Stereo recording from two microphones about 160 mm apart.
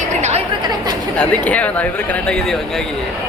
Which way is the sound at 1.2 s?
10° left (ahead or behind).